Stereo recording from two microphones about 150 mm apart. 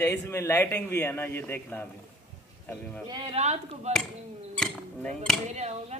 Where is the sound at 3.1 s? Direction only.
30° right (ahead or behind).